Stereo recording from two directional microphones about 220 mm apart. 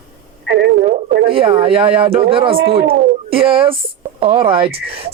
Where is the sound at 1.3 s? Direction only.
25° right (ahead or behind).